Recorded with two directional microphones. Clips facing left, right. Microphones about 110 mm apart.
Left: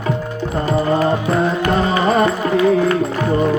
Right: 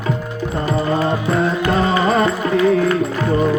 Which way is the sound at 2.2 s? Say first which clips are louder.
Left 1 dB; 30° left (ahead or behind).